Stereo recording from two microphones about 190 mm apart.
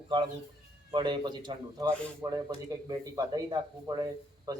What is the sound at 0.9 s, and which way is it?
Speech, 25° right (ahead or behind).